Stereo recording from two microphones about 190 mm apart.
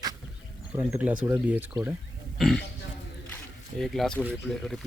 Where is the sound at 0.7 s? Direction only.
5° right (ahead or behind).